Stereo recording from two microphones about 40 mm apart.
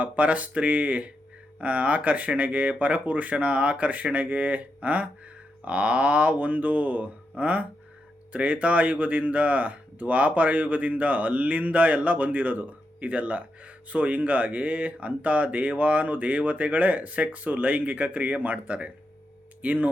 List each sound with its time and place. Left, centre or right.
0.0 s speech: right